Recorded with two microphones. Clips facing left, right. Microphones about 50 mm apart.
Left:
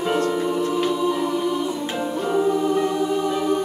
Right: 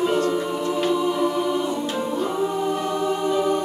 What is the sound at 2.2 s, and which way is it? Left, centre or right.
Music, centre.